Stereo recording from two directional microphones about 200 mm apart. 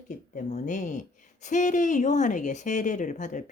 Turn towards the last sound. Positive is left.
turn(degrees=40)  # may be behind; listen again after turning